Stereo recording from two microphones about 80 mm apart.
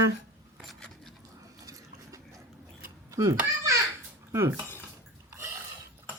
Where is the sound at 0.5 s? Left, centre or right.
Centre.